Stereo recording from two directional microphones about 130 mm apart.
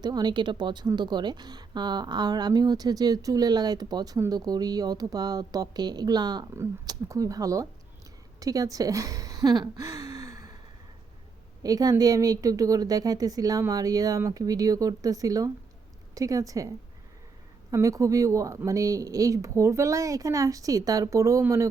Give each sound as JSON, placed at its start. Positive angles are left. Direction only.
{"t": 0.0, "sound": "speech", "side_deg": -35}
{"t": 11.6, "sound": "speech", "side_deg": -30}
{"t": 17.7, "sound": "speech", "side_deg": -25}